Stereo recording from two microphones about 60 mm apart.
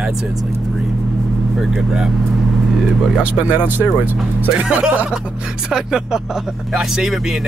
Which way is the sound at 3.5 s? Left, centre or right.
Right.